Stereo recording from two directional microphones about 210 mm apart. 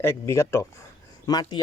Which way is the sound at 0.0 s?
10° left (ahead or behind).